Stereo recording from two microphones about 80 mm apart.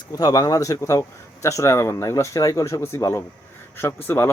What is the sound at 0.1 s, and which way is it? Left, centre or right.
Speech, left.